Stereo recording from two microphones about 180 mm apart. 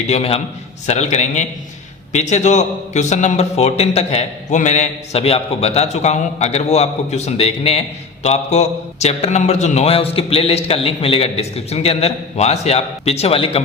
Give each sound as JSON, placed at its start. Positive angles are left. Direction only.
{"t": 0.1, "sound": "a man's voice", "side_deg": 35}